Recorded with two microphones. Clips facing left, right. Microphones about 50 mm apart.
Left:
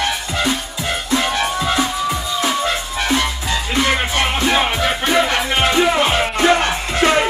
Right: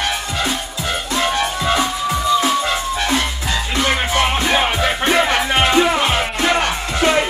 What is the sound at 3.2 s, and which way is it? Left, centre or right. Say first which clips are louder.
Music: left 1 dB; left.